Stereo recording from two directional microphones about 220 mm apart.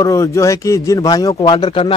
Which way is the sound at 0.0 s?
15° left (ahead or behind).